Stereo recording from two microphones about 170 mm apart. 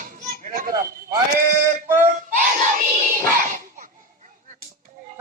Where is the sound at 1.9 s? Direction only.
10° right (ahead or behind).